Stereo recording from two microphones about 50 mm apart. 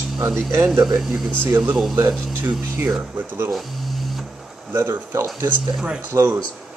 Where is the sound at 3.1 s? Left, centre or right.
Right.